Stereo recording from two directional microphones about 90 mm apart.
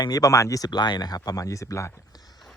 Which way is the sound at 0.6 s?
55° left (ahead or behind).